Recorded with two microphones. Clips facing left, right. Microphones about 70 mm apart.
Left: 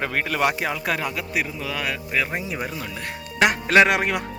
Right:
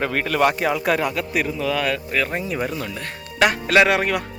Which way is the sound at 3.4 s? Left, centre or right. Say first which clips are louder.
Even; centre.